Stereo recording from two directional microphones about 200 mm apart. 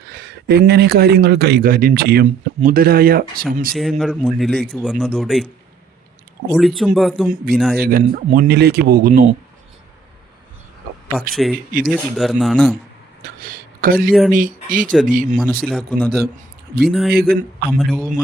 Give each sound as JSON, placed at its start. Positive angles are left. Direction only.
{"t": 0.0, "sound": "speech", "side_deg": -55}
{"t": 3.8, "sound": "speech", "side_deg": 0}
{"t": 6.5, "sound": "speech", "side_deg": 0}
{"t": 7.8, "sound": "speech", "side_deg": -45}
{"t": 11.3, "sound": "speech", "side_deg": 0}
{"t": 13.4, "sound": "a sound", "side_deg": -45}
{"t": 14.1, "sound": "speech", "side_deg": 0}
{"t": 14.3, "sound": "speech", "side_deg": -40}
{"t": 15.6, "sound": "speech", "side_deg": 5}
{"t": 17.2, "sound": "speech", "side_deg": -50}
{"t": 17.7, "sound": "speech", "side_deg": 5}